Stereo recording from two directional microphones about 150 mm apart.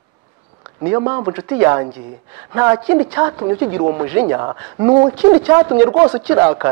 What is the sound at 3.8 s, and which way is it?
Speech, 30° right (ahead or behind).